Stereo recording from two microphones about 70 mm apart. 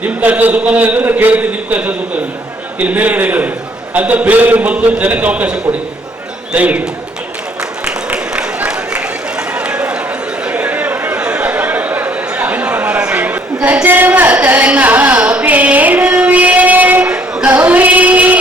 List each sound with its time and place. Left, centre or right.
0.0 s a man's voice: right
8.1 s run: right
10.4 s a sound: centre